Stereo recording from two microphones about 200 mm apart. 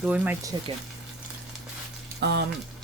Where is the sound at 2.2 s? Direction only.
60° right (ahead or behind).